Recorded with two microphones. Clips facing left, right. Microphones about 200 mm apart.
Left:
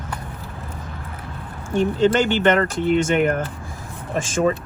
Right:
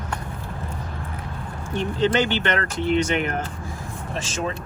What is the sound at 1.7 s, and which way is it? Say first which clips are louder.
Speech: left 4 dB; 45° left (ahead or behind).